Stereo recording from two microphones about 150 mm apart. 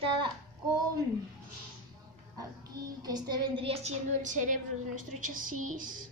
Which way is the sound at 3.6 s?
50° right (ahead or behind).